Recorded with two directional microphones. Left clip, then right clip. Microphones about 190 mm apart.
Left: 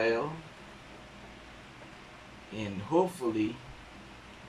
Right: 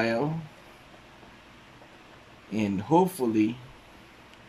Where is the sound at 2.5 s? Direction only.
60° right (ahead or behind).